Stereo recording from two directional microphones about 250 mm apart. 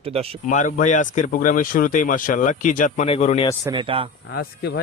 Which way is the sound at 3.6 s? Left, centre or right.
Right.